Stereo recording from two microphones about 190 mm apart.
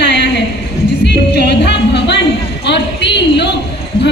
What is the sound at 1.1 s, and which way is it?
Music, 60° left (ahead or behind).